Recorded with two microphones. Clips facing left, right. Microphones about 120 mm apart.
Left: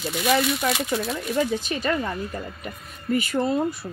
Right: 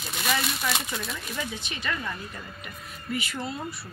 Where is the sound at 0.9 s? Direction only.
40° left (ahead or behind).